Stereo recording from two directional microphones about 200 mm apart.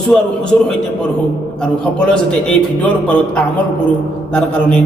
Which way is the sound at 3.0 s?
5° left (ahead or behind).